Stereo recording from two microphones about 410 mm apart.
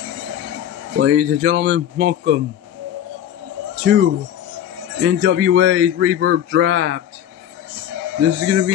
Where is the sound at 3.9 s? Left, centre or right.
Right.